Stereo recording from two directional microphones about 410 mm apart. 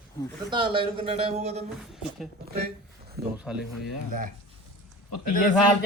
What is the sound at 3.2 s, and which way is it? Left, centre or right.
Speech, right.